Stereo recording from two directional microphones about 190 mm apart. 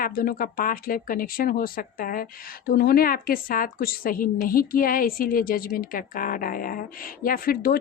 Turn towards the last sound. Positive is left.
turn(degrees=50)  # may be behind; listen again after turning